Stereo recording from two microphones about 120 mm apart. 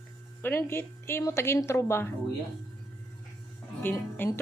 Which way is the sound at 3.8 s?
15° left (ahead or behind).